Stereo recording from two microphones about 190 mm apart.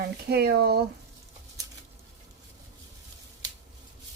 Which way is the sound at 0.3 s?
60° right (ahead or behind).